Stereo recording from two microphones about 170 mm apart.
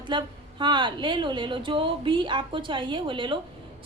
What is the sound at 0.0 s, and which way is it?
A woman's voice, 30° right (ahead or behind).